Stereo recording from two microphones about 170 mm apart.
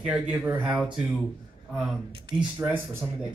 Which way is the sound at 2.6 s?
15° right (ahead or behind).